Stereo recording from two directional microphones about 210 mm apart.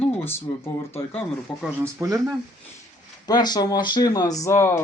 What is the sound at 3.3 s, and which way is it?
Speech, 20° left (ahead or behind).